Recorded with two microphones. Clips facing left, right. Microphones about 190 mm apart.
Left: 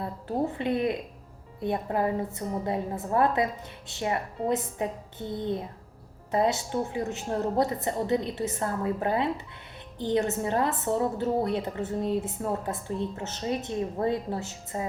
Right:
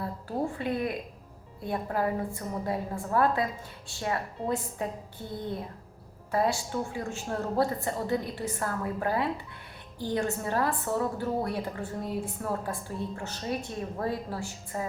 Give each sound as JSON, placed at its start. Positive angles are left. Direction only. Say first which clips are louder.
{"t": 0.0, "sound": "a woman's voice", "louder": "left 2 dB", "side_deg": 20}